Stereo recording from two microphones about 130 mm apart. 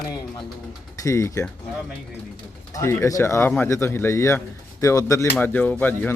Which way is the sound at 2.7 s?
20° left (ahead or behind).